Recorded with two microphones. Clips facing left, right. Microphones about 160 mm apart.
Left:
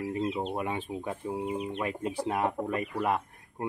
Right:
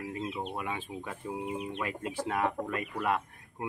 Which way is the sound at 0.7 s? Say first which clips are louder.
Left 5 dB; 20° left (ahead or behind).